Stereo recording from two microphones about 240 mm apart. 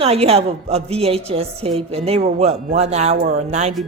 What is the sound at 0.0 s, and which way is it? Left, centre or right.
A woman's voice, right.